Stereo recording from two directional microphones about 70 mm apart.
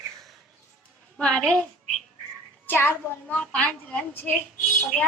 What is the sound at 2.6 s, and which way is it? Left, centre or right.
Speech, left.